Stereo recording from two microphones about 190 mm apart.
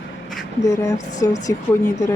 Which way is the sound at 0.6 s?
15° left (ahead or behind).